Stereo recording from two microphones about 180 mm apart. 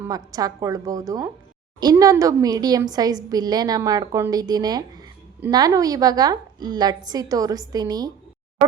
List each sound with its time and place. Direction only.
0.0 s a woman's voice: 20° right (ahead or behind)